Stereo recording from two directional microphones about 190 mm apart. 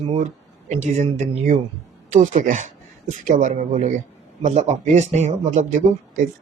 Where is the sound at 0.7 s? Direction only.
35° right (ahead or behind).